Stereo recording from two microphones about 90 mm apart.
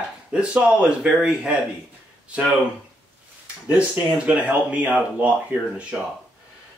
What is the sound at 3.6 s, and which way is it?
Speech, 15° right (ahead or behind).